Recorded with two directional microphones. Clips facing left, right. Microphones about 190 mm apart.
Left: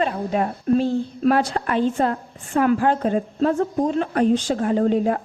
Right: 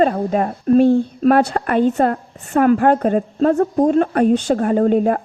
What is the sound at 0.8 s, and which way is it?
A woman's voice, 55° right (ahead or behind).